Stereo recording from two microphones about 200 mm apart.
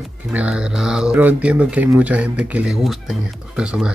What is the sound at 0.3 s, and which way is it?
Speech, 5° right (ahead or behind).